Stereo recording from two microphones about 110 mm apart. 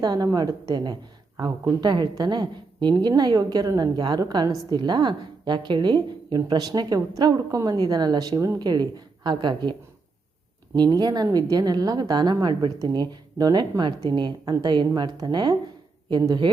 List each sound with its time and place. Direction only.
0.0 s a woman's voice: 35° right (ahead or behind)
10.8 s a woman's voice: 40° right (ahead or behind)